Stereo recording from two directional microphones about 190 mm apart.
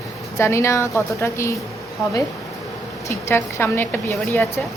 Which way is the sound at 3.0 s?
10° left (ahead or behind).